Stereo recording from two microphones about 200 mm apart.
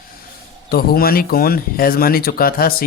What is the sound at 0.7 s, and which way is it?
Speech, 50° left (ahead or behind).